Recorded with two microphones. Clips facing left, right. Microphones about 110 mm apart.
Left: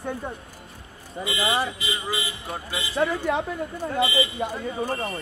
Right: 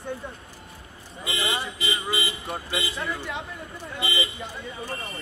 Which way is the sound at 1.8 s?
30° right (ahead or behind).